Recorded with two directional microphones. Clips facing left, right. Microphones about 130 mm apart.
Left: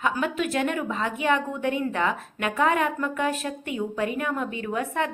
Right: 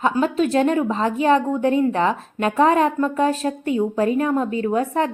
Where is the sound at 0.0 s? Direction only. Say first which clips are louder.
Right 7 dB; 35° right (ahead or behind).